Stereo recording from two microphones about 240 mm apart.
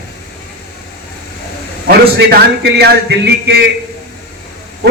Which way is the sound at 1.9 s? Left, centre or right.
Right.